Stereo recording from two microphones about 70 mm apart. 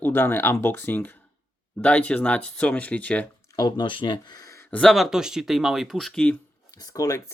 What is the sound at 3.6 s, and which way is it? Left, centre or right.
Speech, left.